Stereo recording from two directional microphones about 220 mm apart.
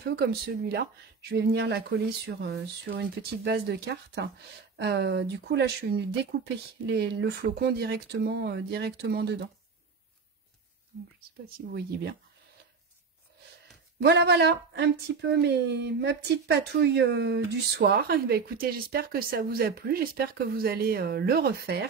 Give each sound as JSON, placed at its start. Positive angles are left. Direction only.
{"t": 0.0, "sound": "speech", "side_deg": -45}
{"t": 11.5, "sound": "speech", "side_deg": -45}
{"t": 13.9, "sound": "speech", "side_deg": -50}